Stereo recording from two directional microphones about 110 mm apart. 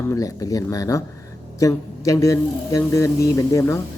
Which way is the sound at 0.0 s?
30° left (ahead or behind).